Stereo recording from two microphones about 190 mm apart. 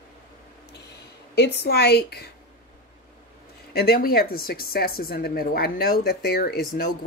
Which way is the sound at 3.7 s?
55° left (ahead or behind).